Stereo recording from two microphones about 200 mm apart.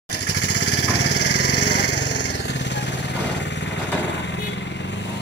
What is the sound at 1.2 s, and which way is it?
Vehicle, 60° left (ahead or behind).